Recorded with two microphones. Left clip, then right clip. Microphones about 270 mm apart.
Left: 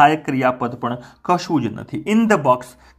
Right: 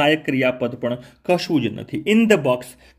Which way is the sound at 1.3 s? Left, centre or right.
Left.